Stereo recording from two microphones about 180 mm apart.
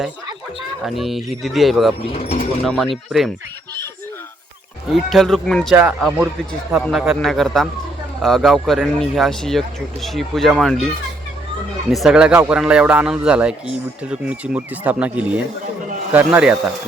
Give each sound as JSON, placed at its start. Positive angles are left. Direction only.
{"t": 0.9, "sound": "speech", "side_deg": 0}
{"t": 2.1, "sound": "speech", "side_deg": 35}
{"t": 2.6, "sound": "speech", "side_deg": 0}
{"t": 4.9, "sound": "a man's voice", "side_deg": 0}